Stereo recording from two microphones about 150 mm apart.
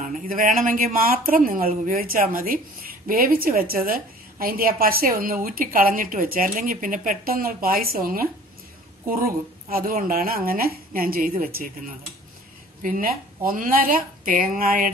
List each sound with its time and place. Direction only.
0.0 s speech: 65° right (ahead or behind)
9.7 s speech: 75° right (ahead or behind)
12.8 s speech: 70° right (ahead or behind)